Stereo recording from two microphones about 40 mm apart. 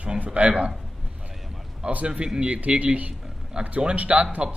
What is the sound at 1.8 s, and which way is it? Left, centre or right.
Speech, right.